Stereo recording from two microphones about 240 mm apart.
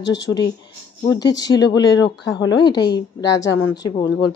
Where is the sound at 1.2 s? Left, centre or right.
Centre.